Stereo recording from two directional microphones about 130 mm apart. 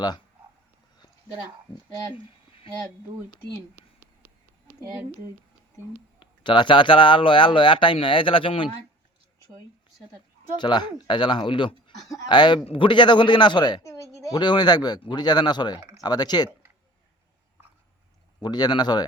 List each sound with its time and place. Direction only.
2.1 s a sound: 45° left (ahead or behind)
3.8 s a sound: 15° right (ahead or behind)
6.1 s speech: 35° left (ahead or behind)
10.6 s speech: 35° left (ahead or behind)
13.8 s speech: 25° left (ahead or behind)
18.4 s speech: 35° left (ahead or behind)